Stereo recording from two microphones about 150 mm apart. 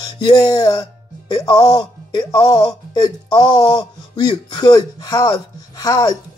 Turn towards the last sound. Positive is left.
turn(degrees=25)  # may be behind; listen again after turning